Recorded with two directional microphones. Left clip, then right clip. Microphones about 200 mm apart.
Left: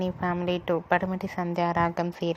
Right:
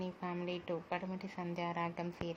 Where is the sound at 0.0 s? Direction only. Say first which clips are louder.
Left 13 dB; 30° left (ahead or behind).